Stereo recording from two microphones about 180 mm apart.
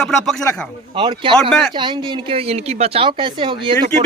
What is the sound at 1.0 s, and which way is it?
Speech, 30° right (ahead or behind).